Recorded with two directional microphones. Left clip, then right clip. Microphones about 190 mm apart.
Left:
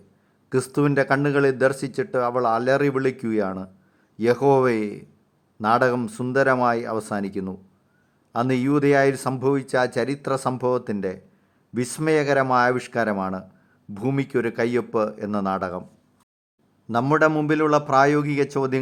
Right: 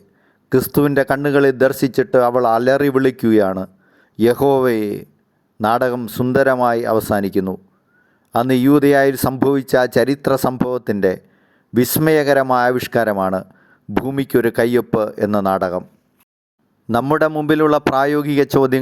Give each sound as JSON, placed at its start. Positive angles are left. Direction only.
{"t": 0.5, "sound": "speech", "side_deg": -35}
{"t": 17.1, "sound": "speech", "side_deg": -40}